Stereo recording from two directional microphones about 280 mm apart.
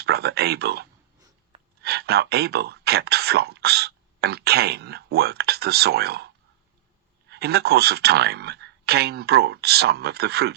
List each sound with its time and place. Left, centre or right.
0.0 s speech: right